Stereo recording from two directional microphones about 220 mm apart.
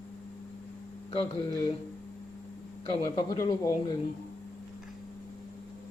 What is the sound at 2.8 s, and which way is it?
Speech, 20° left (ahead or behind).